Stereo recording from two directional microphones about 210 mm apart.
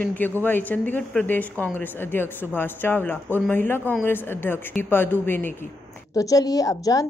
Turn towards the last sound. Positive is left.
turn(degrees=15)  # may be behind; listen again after turning